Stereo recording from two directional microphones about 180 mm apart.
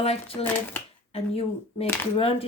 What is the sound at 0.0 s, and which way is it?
Speech, 35° left (ahead or behind).